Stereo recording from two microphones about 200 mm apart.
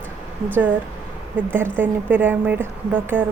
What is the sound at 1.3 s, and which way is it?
Speech, 10° right (ahead or behind).